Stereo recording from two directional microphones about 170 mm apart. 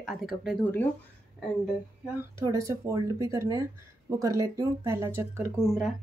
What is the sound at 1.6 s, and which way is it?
Speech, 10° right (ahead or behind).